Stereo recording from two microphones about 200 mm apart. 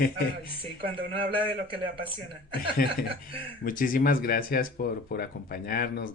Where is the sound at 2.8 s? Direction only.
45° left (ahead or behind).